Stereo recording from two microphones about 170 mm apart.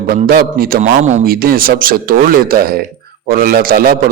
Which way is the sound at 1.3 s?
60° right (ahead or behind).